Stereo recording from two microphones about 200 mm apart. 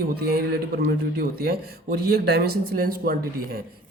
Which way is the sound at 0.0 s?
50° right (ahead or behind).